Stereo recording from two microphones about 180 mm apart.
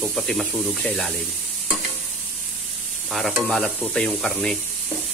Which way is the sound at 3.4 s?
Centre (ahead or behind).